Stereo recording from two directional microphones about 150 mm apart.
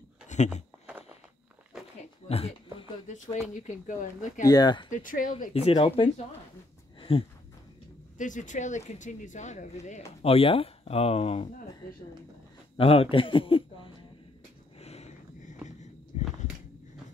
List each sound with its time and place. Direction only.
0.3 s a sound: 55° left (ahead or behind)
0.8 s walk: 10° right (ahead or behind)
2.2 s a sound: 40° left (ahead or behind)
3.5 s speech: 55° left (ahead or behind)
4.5 s speech: 30° left (ahead or behind)
4.9 s speech: 60° left (ahead or behind)
5.5 s speech: 40° left (ahead or behind)
7.0 s a sound: 35° left (ahead or behind)
8.2 s speech: 55° left (ahead or behind)
10.2 s speech: 40° left (ahead or behind)
12.7 s speech: 40° left (ahead or behind)
14.8 s a sound: 45° left (ahead or behind)